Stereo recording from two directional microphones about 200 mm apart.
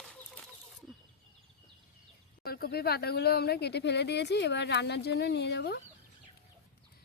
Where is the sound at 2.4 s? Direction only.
50° left (ahead or behind).